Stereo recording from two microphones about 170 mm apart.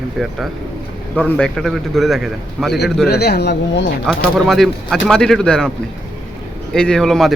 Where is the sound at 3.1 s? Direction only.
70° left (ahead or behind).